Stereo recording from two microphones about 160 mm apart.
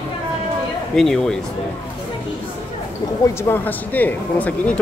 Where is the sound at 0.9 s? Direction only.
5° left (ahead or behind).